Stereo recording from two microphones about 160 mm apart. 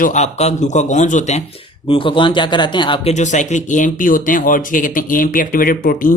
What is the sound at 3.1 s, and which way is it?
Speech, 50° left (ahead or behind).